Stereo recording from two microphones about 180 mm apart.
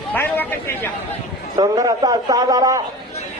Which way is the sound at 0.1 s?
10° left (ahead or behind).